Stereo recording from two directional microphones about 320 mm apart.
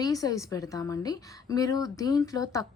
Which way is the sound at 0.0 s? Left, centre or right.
Centre.